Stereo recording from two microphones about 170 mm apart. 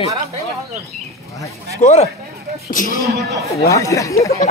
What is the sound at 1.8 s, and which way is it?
Speech, 40° left (ahead or behind).